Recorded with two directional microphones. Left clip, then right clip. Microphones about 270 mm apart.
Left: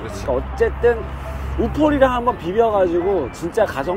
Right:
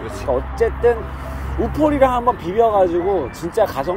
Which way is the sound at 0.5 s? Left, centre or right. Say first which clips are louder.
Even; centre.